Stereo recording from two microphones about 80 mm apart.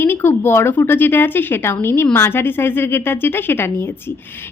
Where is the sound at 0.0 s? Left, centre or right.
Left.